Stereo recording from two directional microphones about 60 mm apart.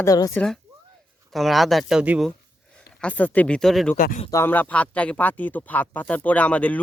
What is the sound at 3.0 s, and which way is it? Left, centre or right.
Speech, left.